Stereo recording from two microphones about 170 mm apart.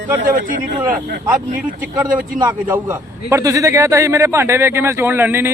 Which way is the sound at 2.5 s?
10° right (ahead or behind).